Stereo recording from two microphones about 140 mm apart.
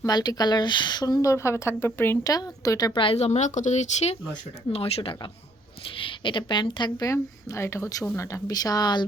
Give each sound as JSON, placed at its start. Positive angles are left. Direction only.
{"t": 0.0, "sound": "speech", "side_deg": 30}